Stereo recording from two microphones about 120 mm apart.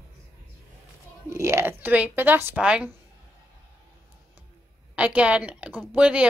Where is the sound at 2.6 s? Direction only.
10° right (ahead or behind).